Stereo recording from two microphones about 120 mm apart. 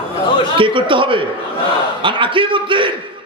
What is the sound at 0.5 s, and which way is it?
Speech, 45° right (ahead or behind).